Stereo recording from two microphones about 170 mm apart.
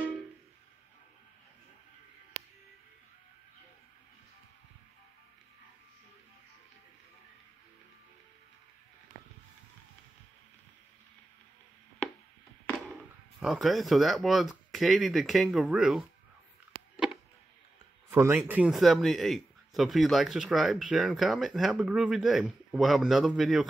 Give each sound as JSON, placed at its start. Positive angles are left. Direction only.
{"t": 13.4, "sound": "speech", "side_deg": 0}
{"t": 16.9, "sound": "insect", "side_deg": 0}
{"t": 18.1, "sound": "speech", "side_deg": -15}
{"t": 18.5, "sound": "speech", "side_deg": -5}